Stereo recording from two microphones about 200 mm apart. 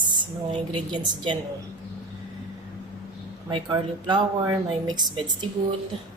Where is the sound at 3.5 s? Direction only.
25° right (ahead or behind).